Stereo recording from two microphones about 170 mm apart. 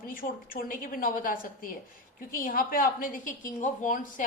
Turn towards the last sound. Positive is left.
turn(degrees=50)  # may be behind; listen again after turning